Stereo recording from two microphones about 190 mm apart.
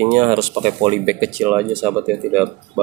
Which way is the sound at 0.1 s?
35° right (ahead or behind).